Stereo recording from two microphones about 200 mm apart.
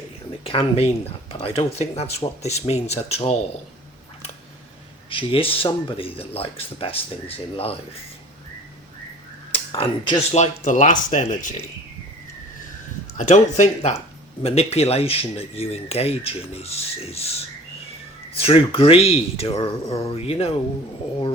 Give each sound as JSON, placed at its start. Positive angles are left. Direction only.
{"t": 0.4, "sound": "speech", "side_deg": 30}
{"t": 5.0, "sound": "speech", "side_deg": 25}
{"t": 9.5, "sound": "speech", "side_deg": 25}
{"t": 10.4, "sound": "speech", "side_deg": 35}
{"t": 13.1, "sound": "speech", "side_deg": 35}